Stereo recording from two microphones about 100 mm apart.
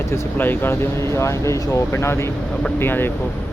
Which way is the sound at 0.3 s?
20° left (ahead or behind).